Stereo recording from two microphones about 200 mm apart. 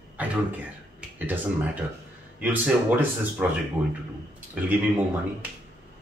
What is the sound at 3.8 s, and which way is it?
Speech, 20° right (ahead or behind).